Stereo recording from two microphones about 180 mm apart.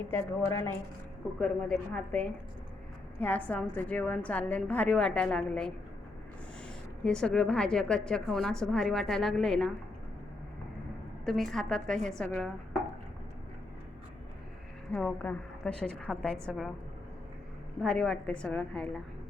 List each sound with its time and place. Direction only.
0.1 s a woman's voice: 15° left (ahead or behind)
1.4 s a woman's voice: 5° left (ahead or behind)
7.0 s a woman's voice: 5° left (ahead or behind)
11.3 s a woman's voice: centre (ahead or behind)
14.9 s a woman's voice: 10° left (ahead or behind)
17.8 s a woman's voice: 5° left (ahead or behind)